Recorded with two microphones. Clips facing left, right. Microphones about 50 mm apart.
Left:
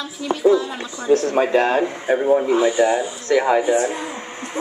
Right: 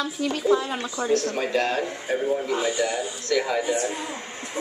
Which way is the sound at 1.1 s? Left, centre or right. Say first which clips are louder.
Left 8 dB; left.